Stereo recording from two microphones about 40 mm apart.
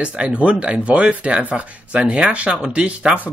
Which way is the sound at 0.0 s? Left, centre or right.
Right.